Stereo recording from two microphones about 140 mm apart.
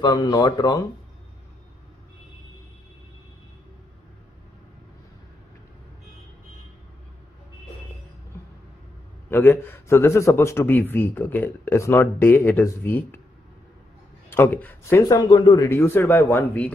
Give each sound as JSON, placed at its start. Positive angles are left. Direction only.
{"t": 0.0, "sound": "speech", "side_deg": 30}
{"t": 9.3, "sound": "a man's voice", "side_deg": 15}
{"t": 14.3, "sound": "a man's voice", "side_deg": 15}
{"t": 15.1, "sound": "a man's voice", "side_deg": 30}
{"t": 15.8, "sound": "a man's voice", "side_deg": 15}